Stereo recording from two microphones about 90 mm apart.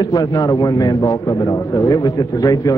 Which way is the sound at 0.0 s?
50° left (ahead or behind).